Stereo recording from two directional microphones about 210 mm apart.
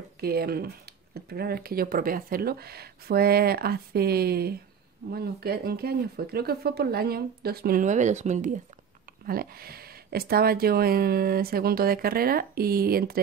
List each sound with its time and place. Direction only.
0.2 s speech: 45° right (ahead or behind)